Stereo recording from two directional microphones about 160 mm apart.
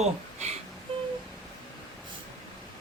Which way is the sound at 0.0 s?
45° right (ahead or behind).